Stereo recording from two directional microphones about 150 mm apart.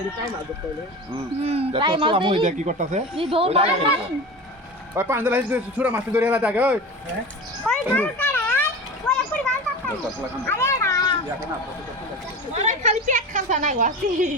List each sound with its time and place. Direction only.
1.4 s speech: 45° right (ahead or behind)
2.5 s speech: 55° right (ahead or behind)
3.2 s speech: 35° right (ahead or behind)
4.9 s a man's voice: 15° right (ahead or behind)
7.9 s a sound: 10° left (ahead or behind)
9.0 s children playing: 5° left (ahead or behind)
10.4 s a sound: 15° left (ahead or behind)
12.6 s a woman's voice: 50° right (ahead or behind)